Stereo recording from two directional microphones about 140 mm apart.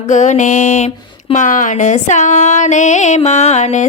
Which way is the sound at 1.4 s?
70° left (ahead or behind).